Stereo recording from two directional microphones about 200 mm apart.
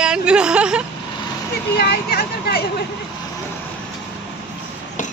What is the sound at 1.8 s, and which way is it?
Speech, 50° left (ahead or behind).